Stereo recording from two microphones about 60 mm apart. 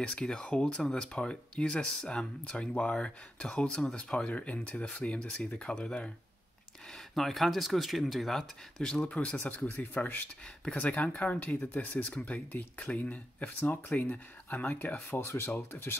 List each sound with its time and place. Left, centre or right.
0.0 s speech: centre
7.2 s speech: centre
9.0 s speech: left
10.6 s speech: centre; by 16.0 s left